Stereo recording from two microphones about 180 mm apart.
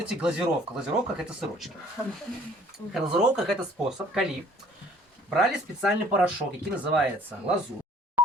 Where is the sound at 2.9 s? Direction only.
5° right (ahead or behind).